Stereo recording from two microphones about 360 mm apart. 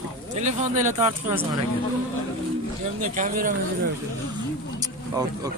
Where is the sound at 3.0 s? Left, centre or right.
Right.